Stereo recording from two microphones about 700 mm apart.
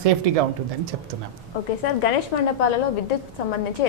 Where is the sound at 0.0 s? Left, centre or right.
Right.